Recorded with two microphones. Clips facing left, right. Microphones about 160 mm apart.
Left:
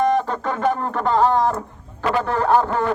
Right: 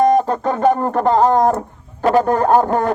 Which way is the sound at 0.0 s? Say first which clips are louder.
Right 5 dB; 40° right (ahead or behind).